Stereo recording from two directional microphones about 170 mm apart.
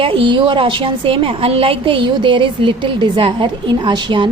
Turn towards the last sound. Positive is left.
turn(degrees=-25)  # may be behind; listen again after turning